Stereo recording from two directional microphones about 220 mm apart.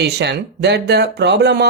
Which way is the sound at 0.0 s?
50° right (ahead or behind).